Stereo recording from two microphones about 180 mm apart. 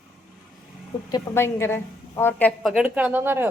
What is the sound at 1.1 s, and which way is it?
A woman's voice, 15° left (ahead or behind).